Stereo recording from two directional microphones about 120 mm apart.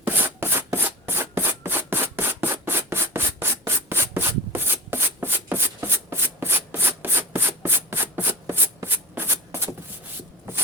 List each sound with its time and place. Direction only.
0.0 s rub: 20° right (ahead or behind)